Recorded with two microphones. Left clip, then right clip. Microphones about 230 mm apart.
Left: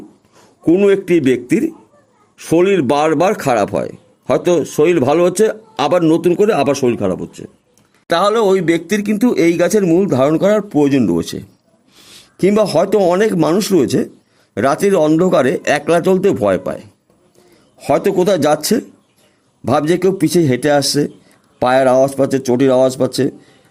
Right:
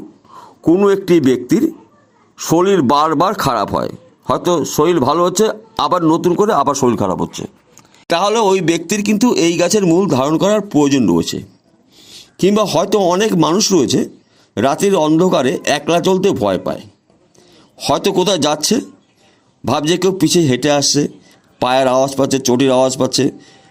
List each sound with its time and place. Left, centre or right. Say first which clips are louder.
0.8 s speech: even; centre
2.9 s speech: right 1 dB; centre
3.5 s speech: left 1 dB; centre
5.1 s speech: left 1 dB; centre
6.1 s speech: even; centre
6.5 s speech: right 1 dB; right
8.1 s speech: left 1 dB; centre
17.8 s speech: left 1 dB; centre